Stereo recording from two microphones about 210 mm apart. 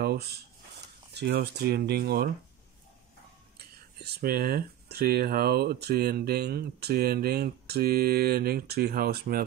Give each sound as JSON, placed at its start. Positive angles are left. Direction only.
{"t": 0.0, "sound": "speech", "side_deg": -50}
{"t": 3.5, "sound": "speech", "side_deg": -50}